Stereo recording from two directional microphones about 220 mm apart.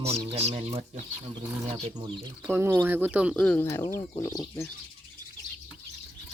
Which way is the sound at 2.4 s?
10° right (ahead or behind).